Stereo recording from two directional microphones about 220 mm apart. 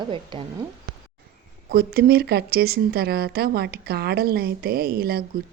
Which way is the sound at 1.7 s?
45° right (ahead or behind).